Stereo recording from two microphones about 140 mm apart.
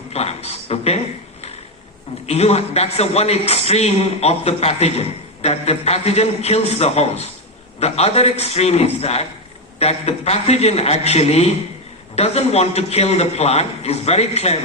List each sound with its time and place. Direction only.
0.1 s a man's voice: 50° left (ahead or behind)